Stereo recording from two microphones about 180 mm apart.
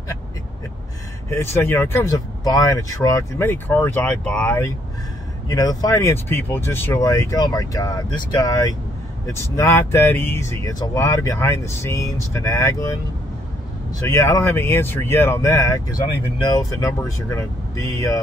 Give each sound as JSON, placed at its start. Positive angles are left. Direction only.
{"t": 1.3, "sound": "speech", "side_deg": 15}
{"t": 14.0, "sound": "speech", "side_deg": 15}